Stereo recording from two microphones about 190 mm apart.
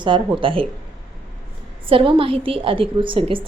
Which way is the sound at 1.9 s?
30° right (ahead or behind).